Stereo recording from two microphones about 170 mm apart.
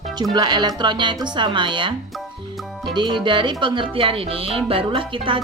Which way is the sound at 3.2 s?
25° right (ahead or behind).